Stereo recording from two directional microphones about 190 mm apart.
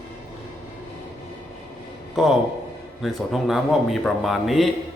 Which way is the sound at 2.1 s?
Centre (ahead or behind).